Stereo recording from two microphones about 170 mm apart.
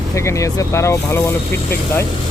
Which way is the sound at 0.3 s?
15° left (ahead or behind).